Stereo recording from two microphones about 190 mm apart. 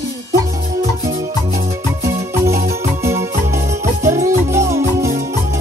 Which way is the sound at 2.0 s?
15° right (ahead or behind).